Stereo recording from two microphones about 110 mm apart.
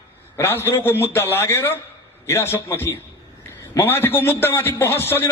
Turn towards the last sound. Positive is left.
turn(degrees=20)  # may be behind; listen again after turning